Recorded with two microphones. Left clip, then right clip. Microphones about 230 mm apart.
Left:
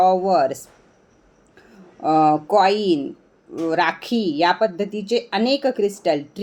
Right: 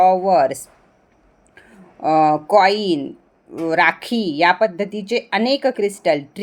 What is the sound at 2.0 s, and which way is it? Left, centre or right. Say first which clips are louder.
A woman's voice: right 1 dB; right.